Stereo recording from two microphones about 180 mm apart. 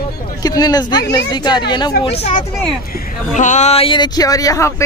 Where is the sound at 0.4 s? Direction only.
20° left (ahead or behind).